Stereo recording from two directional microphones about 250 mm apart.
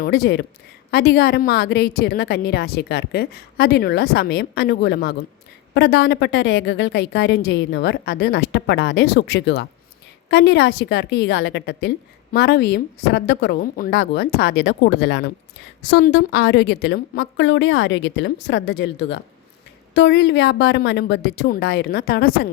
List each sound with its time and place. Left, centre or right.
0.0 s a woman's voice: left